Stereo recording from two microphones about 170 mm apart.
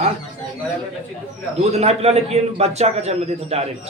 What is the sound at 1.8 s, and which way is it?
A man's voice, 40° right (ahead or behind).